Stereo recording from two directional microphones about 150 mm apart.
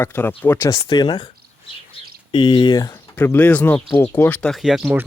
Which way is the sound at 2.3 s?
35° left (ahead or behind).